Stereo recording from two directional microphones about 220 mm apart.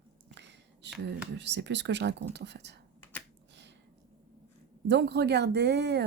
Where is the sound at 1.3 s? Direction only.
50° right (ahead or behind).